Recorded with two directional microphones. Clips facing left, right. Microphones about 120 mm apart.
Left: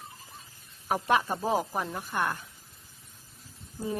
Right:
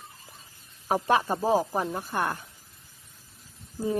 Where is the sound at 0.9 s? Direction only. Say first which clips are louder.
Right 2 dB; 35° right (ahead or behind).